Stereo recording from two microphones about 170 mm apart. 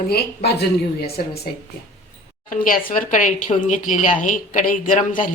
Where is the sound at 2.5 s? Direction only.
55° left (ahead or behind).